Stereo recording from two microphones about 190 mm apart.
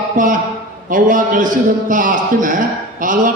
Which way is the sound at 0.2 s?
45° right (ahead or behind).